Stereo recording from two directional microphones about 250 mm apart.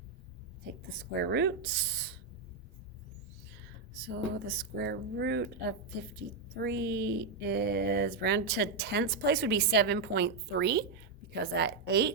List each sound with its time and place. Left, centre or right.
1.2 s speech: right
4.0 s speech: right